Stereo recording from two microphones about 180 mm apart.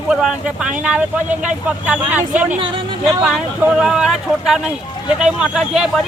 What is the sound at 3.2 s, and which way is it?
A woman's voice, 5° right (ahead or behind).